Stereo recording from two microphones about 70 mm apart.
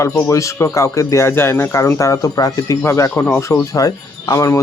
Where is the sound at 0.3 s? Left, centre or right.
Left.